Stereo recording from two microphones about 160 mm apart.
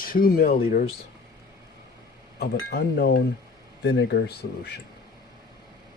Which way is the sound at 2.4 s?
90° left.